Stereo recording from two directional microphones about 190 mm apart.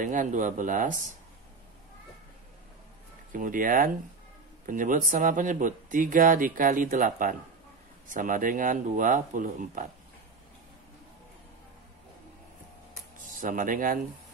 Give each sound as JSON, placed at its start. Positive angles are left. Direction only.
{"t": 0.0, "sound": "speech", "side_deg": -40}
{"t": 3.3, "sound": "speech", "side_deg": -45}
{"t": 13.2, "sound": "speech", "side_deg": -45}